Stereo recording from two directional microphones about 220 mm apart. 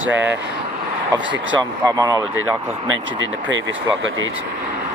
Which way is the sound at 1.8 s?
15° right (ahead or behind).